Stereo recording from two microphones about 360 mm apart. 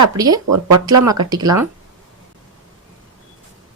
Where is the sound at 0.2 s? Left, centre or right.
Centre.